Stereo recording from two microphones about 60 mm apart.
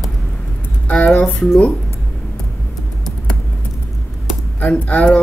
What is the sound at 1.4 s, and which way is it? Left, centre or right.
Speech, centre.